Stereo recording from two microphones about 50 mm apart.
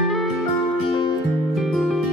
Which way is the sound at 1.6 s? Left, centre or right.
Centre.